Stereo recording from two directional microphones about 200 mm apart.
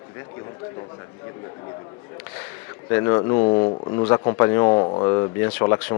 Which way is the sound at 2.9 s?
15° left (ahead or behind).